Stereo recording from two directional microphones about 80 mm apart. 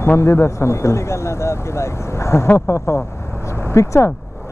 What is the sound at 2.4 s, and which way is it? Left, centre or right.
Speech, left.